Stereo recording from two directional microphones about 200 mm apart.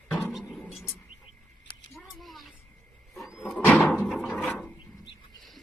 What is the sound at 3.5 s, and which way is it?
Door, 5° left (ahead or behind).